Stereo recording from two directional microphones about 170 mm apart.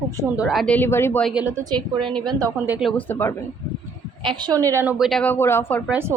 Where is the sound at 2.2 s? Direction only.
25° right (ahead or behind).